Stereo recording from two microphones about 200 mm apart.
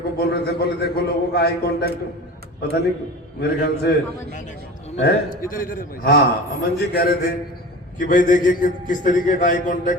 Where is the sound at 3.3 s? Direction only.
55° left (ahead or behind).